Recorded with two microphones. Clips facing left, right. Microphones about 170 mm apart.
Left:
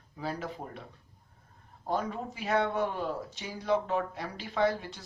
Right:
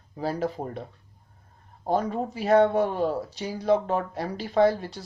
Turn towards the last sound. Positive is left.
turn(degrees=-35)  # may be behind; listen again after turning